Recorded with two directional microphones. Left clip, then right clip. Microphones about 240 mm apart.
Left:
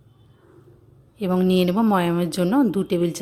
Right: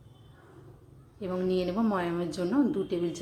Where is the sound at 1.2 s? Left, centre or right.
Left.